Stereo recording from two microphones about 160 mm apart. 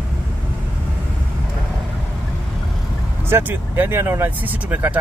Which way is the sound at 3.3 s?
15° right (ahead or behind).